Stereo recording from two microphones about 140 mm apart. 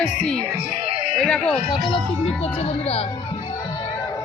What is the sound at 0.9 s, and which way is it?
Music, 45° right (ahead or behind).